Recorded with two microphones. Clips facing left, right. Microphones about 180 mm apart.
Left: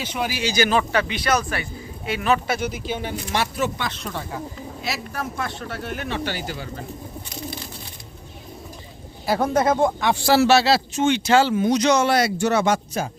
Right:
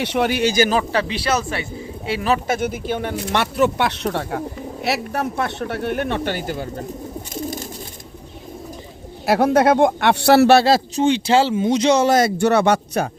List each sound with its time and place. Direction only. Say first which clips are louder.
0.0 s speech: right 7 dB; 70° right (ahead or behind); by 2.6 s 35° right (ahead or behind)
2.6 s speech: right 4 dB; 50° right (ahead or behind)
9.2 s speech: right 5 dB; 70° right (ahead or behind); by 11.0 s 45° right (ahead or behind)
11.0 s speech: right 1 dB; 30° right (ahead or behind)
12.1 s speech: right 4 dB; 55° right (ahead or behind)